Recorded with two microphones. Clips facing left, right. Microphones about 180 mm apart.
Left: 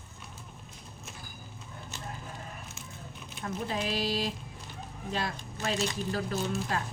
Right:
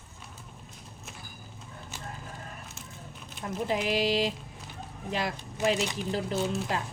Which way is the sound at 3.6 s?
15° right (ahead or behind).